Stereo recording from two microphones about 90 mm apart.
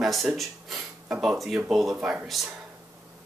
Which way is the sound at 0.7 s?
10° right (ahead or behind).